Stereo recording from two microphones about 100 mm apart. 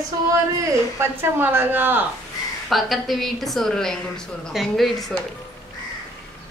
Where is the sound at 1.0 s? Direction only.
20° right (ahead or behind).